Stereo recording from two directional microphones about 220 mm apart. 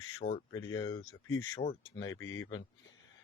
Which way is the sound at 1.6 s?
30° left (ahead or behind).